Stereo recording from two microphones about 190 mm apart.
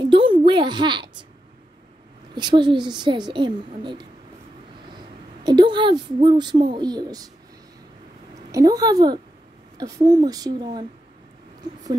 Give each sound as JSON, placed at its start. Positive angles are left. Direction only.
{"t": 0.0, "sound": "a sound", "side_deg": -25}
{"t": 2.3, "sound": "a woman's voice", "side_deg": -25}
{"t": 5.4, "sound": "a woman's voice", "side_deg": -25}
{"t": 8.5, "sound": "a woman's voice", "side_deg": -20}